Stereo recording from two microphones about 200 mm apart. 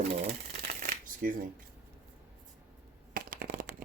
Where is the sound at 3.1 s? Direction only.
45° right (ahead or behind).